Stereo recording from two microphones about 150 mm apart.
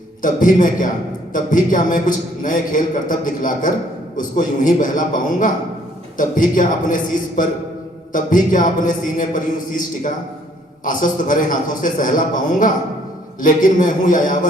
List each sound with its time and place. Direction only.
0.2 s a man's voice: 60° left (ahead or behind)